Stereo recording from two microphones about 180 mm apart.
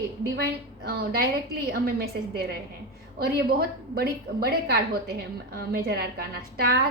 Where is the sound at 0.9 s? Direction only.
55° right (ahead or behind).